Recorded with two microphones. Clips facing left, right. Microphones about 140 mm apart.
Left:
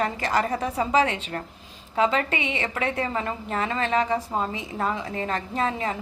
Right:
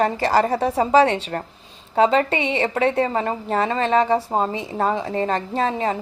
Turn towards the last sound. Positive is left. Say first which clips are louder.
# right 5 dB
turn(degrees=-30)  # may be behind; listen again after turning